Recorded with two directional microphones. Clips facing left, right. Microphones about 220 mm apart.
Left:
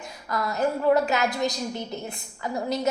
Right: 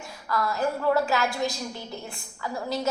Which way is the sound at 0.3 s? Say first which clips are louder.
Left 1 dB; 20° left (ahead or behind).